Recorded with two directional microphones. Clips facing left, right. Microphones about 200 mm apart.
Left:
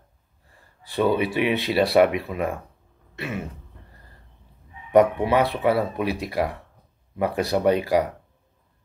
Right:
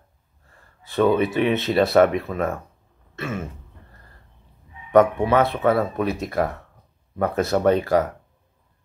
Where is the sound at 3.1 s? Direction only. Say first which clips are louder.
Right 2 dB; 15° left (ahead or behind).